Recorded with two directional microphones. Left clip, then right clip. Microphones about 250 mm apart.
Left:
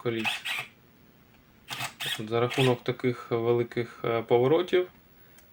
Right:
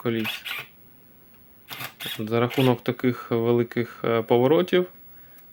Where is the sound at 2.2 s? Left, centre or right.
Right.